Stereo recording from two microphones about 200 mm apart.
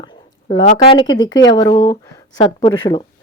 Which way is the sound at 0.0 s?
20° left (ahead or behind).